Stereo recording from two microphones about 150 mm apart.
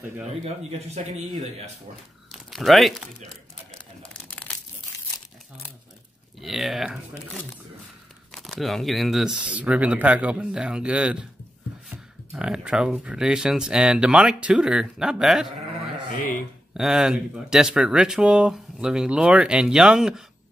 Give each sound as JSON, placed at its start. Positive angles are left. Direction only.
{"t": 0.7, "sound": "speech", "side_deg": -45}
{"t": 2.3, "sound": "speech", "side_deg": 0}
{"t": 4.0, "sound": "crumpling", "side_deg": 5}
{"t": 6.4, "sound": "speech", "side_deg": 0}
{"t": 16.1, "sound": "speech", "side_deg": 65}
{"t": 16.7, "sound": "speech", "side_deg": -5}